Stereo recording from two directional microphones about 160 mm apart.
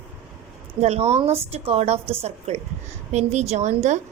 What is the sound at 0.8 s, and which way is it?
A woman's voice, 40° right (ahead or behind).